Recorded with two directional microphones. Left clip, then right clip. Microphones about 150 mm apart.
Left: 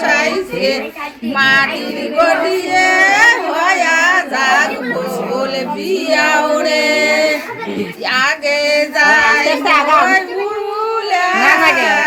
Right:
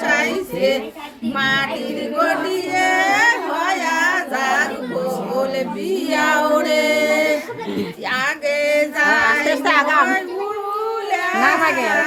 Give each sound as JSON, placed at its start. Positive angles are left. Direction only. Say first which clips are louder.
{"t": 0.0, "sound": "child singing", "louder": "left 5 dB", "side_deg": -25}
{"t": 1.4, "sound": "singing", "louder": "left 8 dB", "side_deg": -25}
{"t": 2.1, "sound": "speech", "louder": "left 7 dB", "side_deg": -20}
{"t": 6.1, "sound": "singing", "louder": "left 4 dB", "side_deg": -25}
{"t": 8.1, "sound": "female singing", "louder": "left 6 dB", "side_deg": -25}
{"t": 11.1, "sound": "a sound", "louder": "left 6 dB", "side_deg": -25}
{"t": 11.6, "sound": "a sound", "louder": "left 6 dB", "side_deg": -5}